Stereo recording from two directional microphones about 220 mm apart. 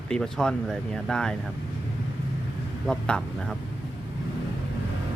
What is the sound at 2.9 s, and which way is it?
Speech, 5° left (ahead or behind).